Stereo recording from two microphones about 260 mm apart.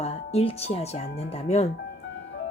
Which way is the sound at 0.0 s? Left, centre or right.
Left.